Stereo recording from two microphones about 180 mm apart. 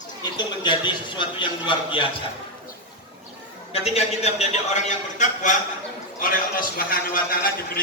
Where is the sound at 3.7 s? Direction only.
35° left (ahead or behind).